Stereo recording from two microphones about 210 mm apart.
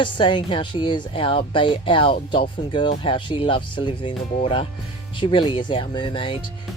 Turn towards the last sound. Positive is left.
turn(degrees=25)  # may be behind; listen again after turning